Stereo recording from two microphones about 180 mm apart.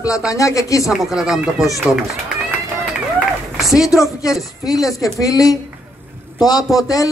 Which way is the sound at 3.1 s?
Centre (ahead or behind).